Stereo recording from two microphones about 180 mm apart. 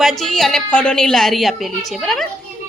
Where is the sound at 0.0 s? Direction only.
Centre (ahead or behind).